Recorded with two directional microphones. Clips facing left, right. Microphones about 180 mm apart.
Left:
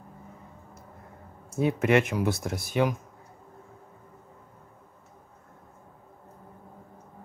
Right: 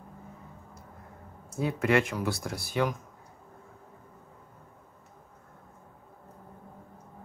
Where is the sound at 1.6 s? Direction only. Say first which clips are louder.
Left 3 dB; 20° left (ahead or behind).